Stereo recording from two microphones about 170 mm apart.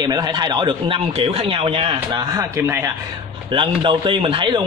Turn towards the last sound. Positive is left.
turn(degrees=-30)  # may be behind; listen again after turning